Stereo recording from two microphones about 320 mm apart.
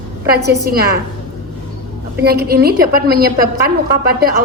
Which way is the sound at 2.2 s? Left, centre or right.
Right.